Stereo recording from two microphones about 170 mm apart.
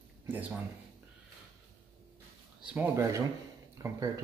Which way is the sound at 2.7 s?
10° right (ahead or behind).